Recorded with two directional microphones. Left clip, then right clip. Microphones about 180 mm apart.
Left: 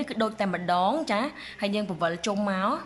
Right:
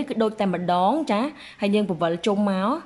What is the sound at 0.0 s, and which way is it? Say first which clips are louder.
A woman's voice: right 4 dB; 15° right (ahead or behind).